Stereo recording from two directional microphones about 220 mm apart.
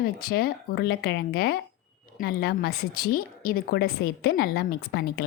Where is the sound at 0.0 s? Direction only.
45° left (ahead or behind).